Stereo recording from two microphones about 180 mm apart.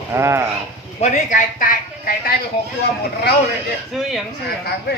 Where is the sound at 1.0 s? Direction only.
45° left (ahead or behind).